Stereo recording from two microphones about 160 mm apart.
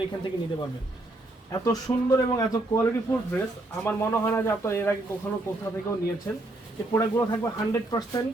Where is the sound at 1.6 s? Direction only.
20° left (ahead or behind).